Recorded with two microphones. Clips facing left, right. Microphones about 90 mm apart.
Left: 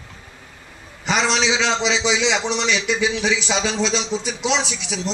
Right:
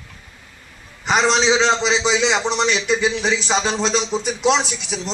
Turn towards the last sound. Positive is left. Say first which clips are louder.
# right 4 dB
turn(degrees=-45)  # may be behind; listen again after turning